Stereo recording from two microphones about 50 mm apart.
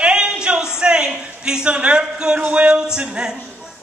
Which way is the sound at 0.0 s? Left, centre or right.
Centre.